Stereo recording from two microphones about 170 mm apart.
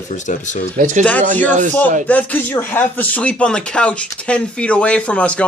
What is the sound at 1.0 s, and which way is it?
Speech, 10° left (ahead or behind).